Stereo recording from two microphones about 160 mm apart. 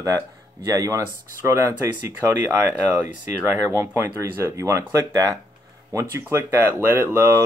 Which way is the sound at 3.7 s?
20° right (ahead or behind).